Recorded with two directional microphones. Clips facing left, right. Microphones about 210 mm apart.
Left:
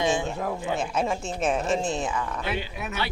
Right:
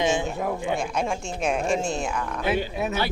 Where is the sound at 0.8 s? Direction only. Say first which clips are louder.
Even; 5° left (ahead or behind).